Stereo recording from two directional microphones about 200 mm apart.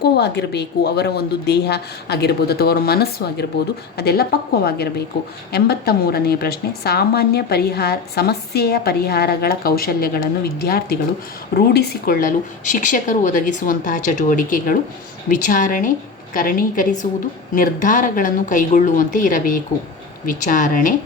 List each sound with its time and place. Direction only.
0.0 s a woman's voice: 55° left (ahead or behind)